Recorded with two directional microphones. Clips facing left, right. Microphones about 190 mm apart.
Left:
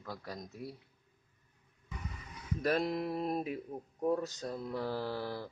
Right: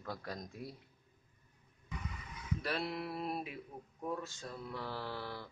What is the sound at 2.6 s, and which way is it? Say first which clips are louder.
Speech: left 8 dB; 45° left (ahead or behind).